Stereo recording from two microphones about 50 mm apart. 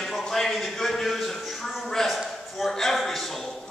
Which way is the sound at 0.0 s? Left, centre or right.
Centre.